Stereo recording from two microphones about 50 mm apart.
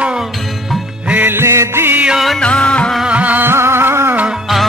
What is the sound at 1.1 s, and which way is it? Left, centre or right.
Music, right.